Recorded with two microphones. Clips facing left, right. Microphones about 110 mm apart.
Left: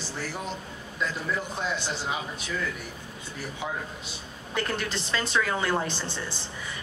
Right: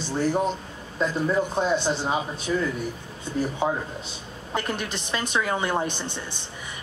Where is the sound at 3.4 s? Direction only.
35° right (ahead or behind).